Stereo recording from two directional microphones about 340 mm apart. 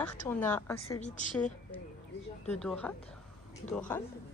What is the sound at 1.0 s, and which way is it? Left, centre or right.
Speech, left.